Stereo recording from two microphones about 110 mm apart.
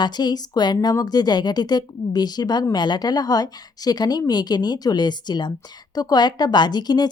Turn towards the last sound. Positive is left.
turn(degrees=40)  # may be behind; listen again after turning